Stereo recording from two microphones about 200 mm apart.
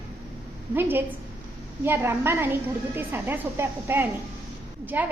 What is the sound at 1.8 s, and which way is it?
A woman's voice, 10° right (ahead or behind).